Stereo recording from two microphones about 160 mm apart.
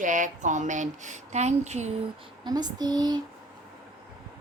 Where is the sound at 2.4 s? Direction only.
25° right (ahead or behind).